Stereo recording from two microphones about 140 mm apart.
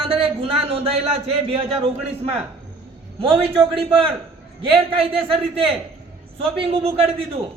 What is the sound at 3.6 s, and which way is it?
A woman's voice, 40° right (ahead or behind).